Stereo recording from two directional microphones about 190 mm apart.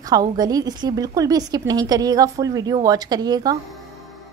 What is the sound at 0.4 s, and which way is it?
A woman's voice, 20° right (ahead or behind).